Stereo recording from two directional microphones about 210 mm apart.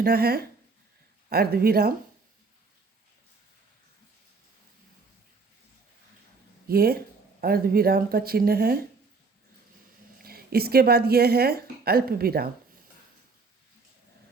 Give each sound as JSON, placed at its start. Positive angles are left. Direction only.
{"t": 0.0, "sound": "speech", "side_deg": -45}
{"t": 6.7, "sound": "speech", "side_deg": -45}
{"t": 10.2, "sound": "a woman's voice", "side_deg": -45}